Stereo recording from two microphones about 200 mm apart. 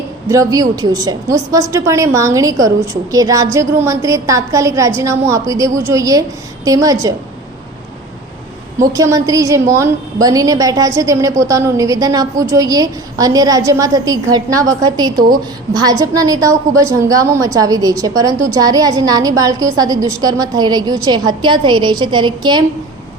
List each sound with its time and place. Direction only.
0.3 s a woman's voice: 15° right (ahead or behind)
8.9 s a woman's voice: 15° right (ahead or behind)